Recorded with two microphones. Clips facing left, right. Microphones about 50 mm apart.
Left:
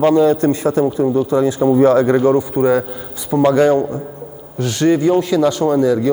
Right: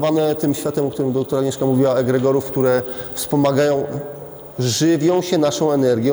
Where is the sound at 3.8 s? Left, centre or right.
Left.